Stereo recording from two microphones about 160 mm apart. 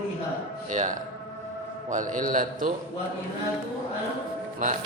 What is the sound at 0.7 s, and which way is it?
A man's voice, 50° right (ahead or behind).